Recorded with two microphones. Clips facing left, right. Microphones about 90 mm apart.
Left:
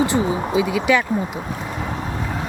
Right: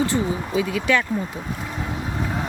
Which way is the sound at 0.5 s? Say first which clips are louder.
Left 3 dB; 15° left (ahead or behind).